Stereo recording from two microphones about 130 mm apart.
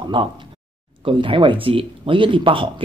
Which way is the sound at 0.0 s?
40° right (ahead or behind).